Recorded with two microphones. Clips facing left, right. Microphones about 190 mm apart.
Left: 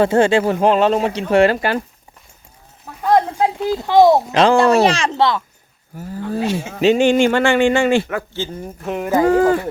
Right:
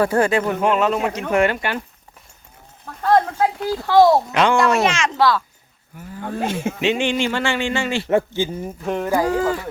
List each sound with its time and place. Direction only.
0.0 s speech: 25° left (ahead or behind)
2.8 s speech: 15° left (ahead or behind)
4.3 s speech: 30° left (ahead or behind)
6.0 s speech: 40° left (ahead or behind)
6.4 s speech: 55° right (ahead or behind)
6.7 s speech: 40° left (ahead or behind)
8.3 s speech: 10° right (ahead or behind)
9.2 s speech: 55° left (ahead or behind)